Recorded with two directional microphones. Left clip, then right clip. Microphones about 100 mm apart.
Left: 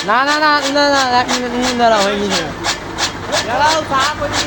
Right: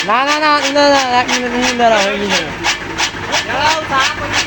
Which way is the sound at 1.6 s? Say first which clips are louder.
Right 1 dB; 5° right (ahead or behind).